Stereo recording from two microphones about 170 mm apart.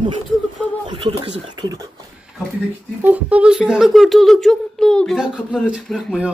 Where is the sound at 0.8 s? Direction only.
30° right (ahead or behind).